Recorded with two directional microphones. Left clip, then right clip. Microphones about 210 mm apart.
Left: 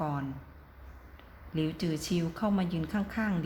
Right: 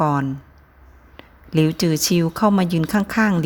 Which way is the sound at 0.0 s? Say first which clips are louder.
Right 15 dB; 55° right (ahead or behind).